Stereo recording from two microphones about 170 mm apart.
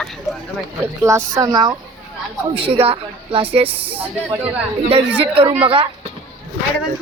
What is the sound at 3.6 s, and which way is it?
Speech, 10° right (ahead or behind).